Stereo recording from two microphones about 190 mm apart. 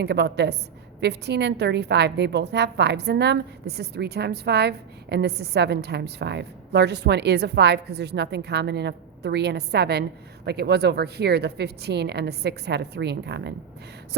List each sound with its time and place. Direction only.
0.0 s a woman's voice: 60° right (ahead or behind)